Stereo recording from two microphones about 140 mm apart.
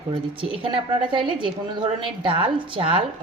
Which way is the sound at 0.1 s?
40° right (ahead or behind).